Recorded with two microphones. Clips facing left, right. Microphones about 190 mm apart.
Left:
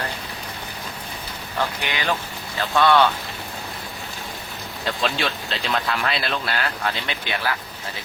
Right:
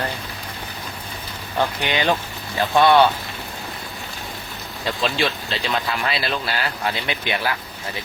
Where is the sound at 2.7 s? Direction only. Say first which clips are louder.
Right 3 dB; 15° right (ahead or behind).